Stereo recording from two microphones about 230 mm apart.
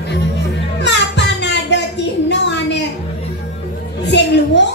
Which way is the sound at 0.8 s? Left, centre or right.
Left.